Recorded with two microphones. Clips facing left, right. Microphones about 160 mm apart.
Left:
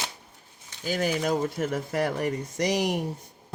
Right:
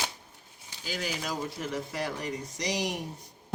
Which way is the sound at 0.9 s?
55° left (ahead or behind).